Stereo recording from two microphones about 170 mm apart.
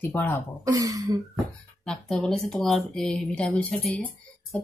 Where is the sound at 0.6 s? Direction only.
20° right (ahead or behind).